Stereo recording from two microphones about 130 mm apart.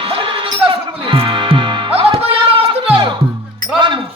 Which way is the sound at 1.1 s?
40° right (ahead or behind).